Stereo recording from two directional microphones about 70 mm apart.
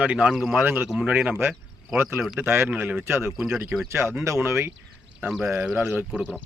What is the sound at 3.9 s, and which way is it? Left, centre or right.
Speech, right.